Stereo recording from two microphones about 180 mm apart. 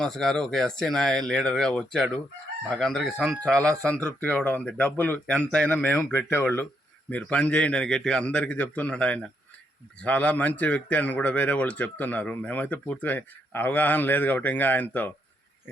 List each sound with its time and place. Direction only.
0.0 s speech: 5° left (ahead or behind)